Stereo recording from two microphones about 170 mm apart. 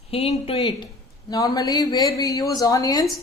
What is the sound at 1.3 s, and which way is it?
A woman's voice, 20° left (ahead or behind).